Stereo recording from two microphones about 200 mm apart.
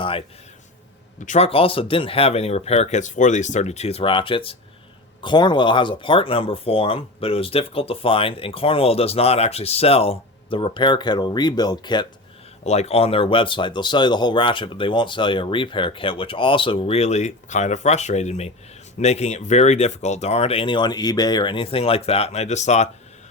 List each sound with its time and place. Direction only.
0.0 s a sound: 25° left (ahead or behind)
1.2 s speech: 35° left (ahead or behind)
12.6 s speech: 35° left (ahead or behind)